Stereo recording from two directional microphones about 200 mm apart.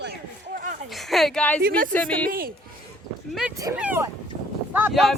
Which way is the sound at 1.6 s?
45° right (ahead or behind).